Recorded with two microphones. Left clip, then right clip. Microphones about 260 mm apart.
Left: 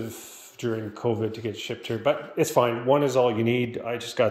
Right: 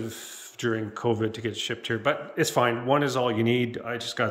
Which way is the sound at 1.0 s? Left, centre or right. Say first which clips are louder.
Even; centre.